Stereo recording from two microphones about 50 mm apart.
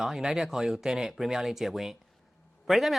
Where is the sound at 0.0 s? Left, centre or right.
Centre.